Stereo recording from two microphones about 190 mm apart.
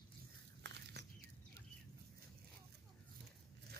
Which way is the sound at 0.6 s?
65° right (ahead or behind).